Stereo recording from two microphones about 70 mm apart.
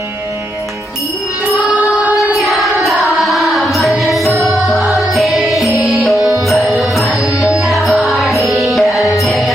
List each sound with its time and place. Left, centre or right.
1.8 s music: right
2.4 s carnatic music: centre
2.8 s music: centre
4.3 s music: right
4.5 s music: centre